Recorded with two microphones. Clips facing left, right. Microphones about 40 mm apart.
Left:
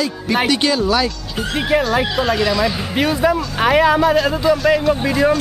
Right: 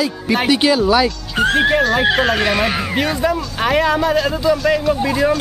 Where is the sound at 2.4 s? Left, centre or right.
Right.